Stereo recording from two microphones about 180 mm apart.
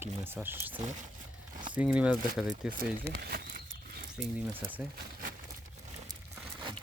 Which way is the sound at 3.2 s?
55° right (ahead or behind).